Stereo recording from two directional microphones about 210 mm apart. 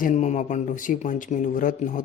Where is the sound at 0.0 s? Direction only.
35° left (ahead or behind).